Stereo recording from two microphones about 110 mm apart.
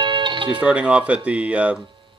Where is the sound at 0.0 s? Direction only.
45° right (ahead or behind).